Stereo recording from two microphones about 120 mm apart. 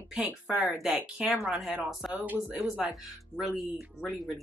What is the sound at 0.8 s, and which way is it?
Speech, 5° right (ahead or behind).